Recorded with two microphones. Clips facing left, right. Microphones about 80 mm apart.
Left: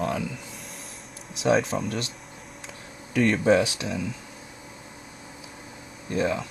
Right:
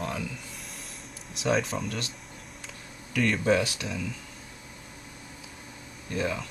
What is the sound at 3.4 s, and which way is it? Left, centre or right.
Speech, centre.